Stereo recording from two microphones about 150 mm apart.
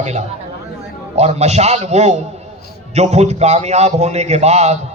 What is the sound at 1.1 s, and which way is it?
Speech, 45° right (ahead or behind).